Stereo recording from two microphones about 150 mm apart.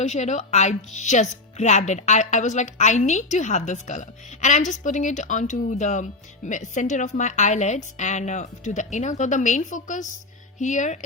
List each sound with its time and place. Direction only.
0.0 s speech: 50° left (ahead or behind)